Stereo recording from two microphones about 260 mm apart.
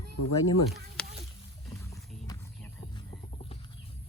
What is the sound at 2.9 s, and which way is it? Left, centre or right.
Music, left.